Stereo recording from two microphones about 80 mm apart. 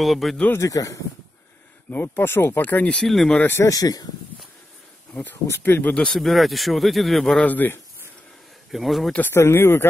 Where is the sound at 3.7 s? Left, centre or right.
Left.